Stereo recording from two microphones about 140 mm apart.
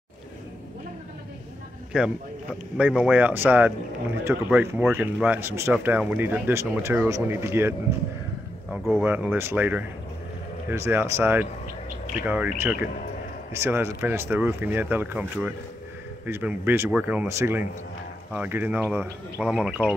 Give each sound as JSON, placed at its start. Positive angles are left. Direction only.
{"t": 1.9, "sound": "speech", "side_deg": -5}
{"t": 8.6, "sound": "speech", "side_deg": 0}
{"t": 9.0, "sound": "speech", "side_deg": -15}